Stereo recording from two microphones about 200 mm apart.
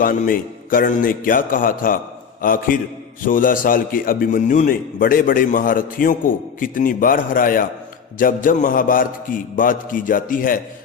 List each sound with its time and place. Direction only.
0.0 s a man's voice: 40° left (ahead or behind)